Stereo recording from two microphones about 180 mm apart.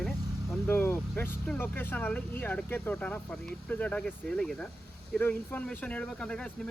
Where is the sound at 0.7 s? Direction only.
10° left (ahead or behind).